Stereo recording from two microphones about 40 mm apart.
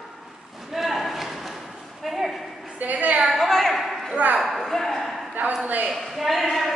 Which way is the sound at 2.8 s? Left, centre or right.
Right.